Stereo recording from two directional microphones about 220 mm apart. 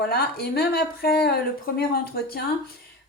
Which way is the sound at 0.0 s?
45° left (ahead or behind).